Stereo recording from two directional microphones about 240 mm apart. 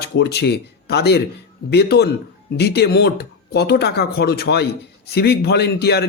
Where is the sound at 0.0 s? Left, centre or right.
Left.